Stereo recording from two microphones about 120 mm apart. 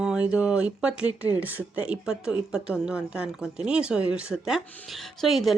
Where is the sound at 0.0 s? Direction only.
5° right (ahead or behind).